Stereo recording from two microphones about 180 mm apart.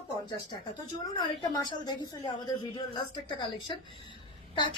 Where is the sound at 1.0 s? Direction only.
25° left (ahead or behind).